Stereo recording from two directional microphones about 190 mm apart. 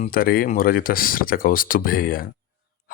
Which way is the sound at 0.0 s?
50° left (ahead or behind).